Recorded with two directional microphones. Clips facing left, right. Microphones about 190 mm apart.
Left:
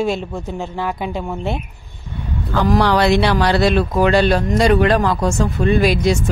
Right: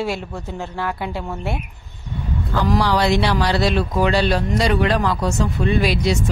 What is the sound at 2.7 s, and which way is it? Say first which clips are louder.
Speech: left 4 dB; 60° left (ahead or behind).